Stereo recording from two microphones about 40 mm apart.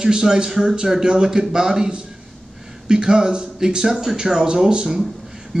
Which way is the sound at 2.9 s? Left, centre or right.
Centre.